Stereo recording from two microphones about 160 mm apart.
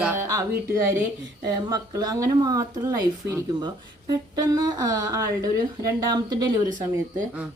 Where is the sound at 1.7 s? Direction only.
25° right (ahead or behind).